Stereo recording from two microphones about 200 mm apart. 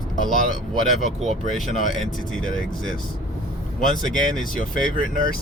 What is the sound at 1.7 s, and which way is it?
Speech, 40° left (ahead or behind).